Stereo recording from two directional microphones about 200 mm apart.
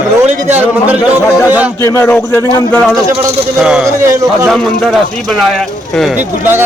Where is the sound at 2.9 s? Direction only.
15° right (ahead or behind).